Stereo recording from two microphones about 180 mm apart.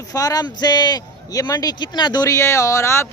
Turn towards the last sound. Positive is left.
turn(degrees=15)  # may be behind; listen again after turning